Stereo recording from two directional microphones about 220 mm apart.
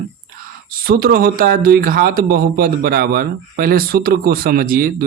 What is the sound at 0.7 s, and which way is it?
A man's voice, 40° right (ahead or behind).